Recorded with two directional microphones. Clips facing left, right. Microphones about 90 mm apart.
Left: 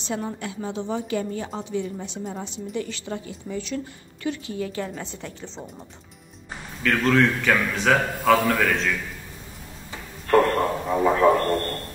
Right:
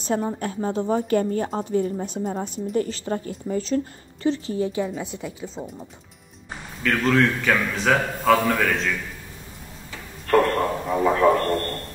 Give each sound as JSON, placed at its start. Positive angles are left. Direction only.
{"t": 0.0, "sound": "a woman's voice", "side_deg": -40}
{"t": 4.7, "sound": "a woman's voice", "side_deg": -10}
{"t": 10.2, "sound": "a man's voice", "side_deg": 5}